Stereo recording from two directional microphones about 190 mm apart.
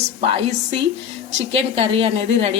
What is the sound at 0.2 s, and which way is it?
A woman's voice, 35° right (ahead or behind).